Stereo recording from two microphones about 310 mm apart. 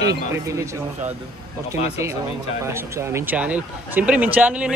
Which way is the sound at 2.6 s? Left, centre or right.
Centre.